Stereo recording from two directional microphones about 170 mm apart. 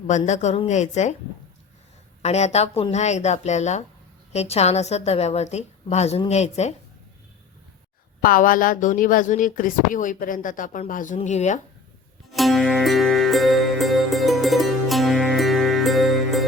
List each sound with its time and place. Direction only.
0.1 s speech: 40° left (ahead or behind)
2.2 s a woman's voice: 40° left (ahead or behind)
8.2 s speech: 55° left (ahead or behind)
12.3 s music: centre (ahead or behind)